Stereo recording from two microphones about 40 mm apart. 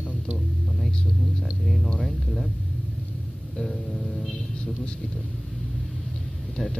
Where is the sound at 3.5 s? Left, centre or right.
Centre.